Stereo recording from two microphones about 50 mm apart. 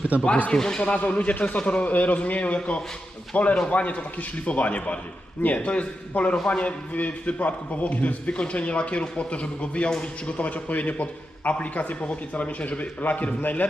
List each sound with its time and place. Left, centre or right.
0.1 s speech: right
0.5 s a man's voice: centre; by 13.7 s left